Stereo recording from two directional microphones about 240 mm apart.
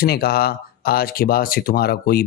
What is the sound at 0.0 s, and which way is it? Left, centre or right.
Speech, left.